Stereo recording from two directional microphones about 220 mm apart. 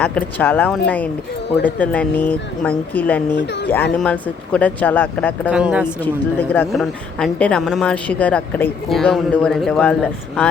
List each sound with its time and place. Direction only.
0.0 s speech: 5° left (ahead or behind)
3.3 s speech: 50° left (ahead or behind)
3.9 s speech: 5° left (ahead or behind)
5.5 s a woman's voice: 5° right (ahead or behind)